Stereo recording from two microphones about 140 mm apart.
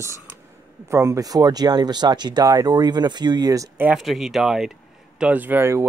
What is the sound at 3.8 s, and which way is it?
Speech, centre (ahead or behind).